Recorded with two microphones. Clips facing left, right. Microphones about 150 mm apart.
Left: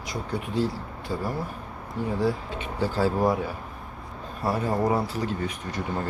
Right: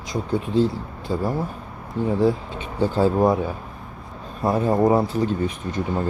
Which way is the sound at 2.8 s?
25° right (ahead or behind).